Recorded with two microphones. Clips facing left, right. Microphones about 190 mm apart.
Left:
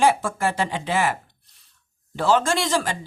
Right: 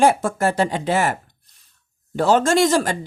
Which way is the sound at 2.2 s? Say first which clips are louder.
Right 5 dB; 45° right (ahead or behind).